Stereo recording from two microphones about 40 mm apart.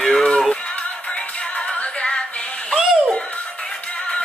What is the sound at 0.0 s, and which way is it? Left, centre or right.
Music, centre.